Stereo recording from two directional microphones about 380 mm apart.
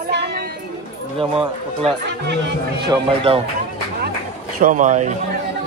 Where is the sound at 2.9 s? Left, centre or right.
Centre.